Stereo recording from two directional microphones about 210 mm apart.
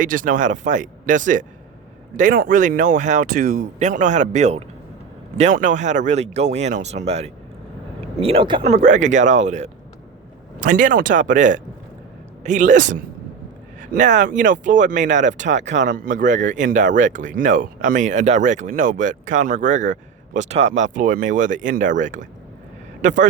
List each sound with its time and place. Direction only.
0.0 s speech: 40° right (ahead or behind)